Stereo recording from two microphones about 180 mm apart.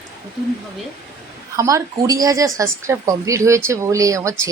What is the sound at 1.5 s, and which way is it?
A woman's voice, 15° right (ahead or behind).